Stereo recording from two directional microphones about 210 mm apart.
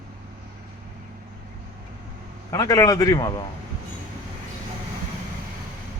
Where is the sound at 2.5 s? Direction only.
15° left (ahead or behind).